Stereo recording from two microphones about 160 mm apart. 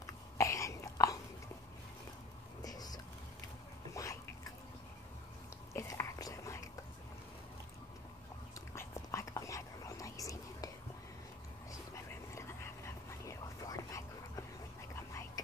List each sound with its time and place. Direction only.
0.0 s cough: 20° left (ahead or behind)
2.6 s whispering: 25° left (ahead or behind)
3.9 s a sound: 20° left (ahead or behind)
5.7 s whispering: 20° left (ahead or behind)
8.7 s whispering: 20° left (ahead or behind)
11.7 s dog: 20° left (ahead or behind)